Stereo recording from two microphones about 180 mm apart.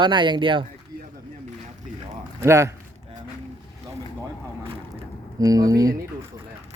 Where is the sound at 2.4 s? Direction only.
15° right (ahead or behind).